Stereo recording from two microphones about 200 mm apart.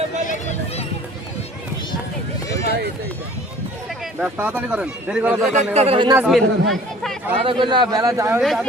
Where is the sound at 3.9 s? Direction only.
5° right (ahead or behind).